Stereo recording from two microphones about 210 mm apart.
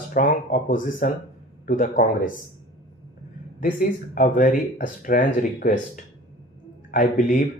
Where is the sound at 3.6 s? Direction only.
40° left (ahead or behind).